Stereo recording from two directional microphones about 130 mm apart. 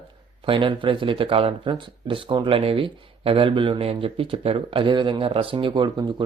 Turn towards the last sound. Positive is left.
turn(degrees=-35)  # may be behind; listen again after turning